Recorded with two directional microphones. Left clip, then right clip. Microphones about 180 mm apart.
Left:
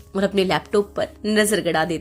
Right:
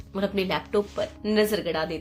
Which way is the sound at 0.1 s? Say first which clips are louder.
Left 7 dB; 40° left (ahead or behind).